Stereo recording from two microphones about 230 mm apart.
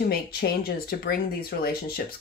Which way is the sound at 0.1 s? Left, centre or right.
Left.